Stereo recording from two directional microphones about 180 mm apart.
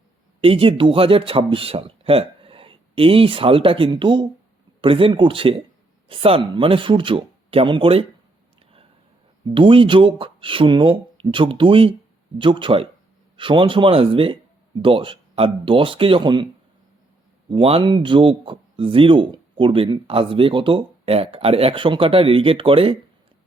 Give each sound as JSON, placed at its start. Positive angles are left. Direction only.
{"t": 0.4, "sound": "speech", "side_deg": -30}
{"t": 9.5, "sound": "speech", "side_deg": -30}
{"t": 17.5, "sound": "speech", "side_deg": -30}